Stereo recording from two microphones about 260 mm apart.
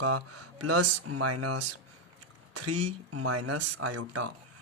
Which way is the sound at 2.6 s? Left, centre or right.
Right.